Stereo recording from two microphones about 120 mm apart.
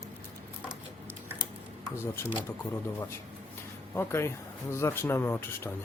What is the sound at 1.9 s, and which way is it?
Speech, 20° left (ahead or behind).